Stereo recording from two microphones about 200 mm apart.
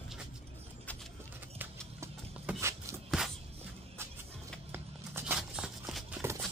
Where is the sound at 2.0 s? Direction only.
15° right (ahead or behind).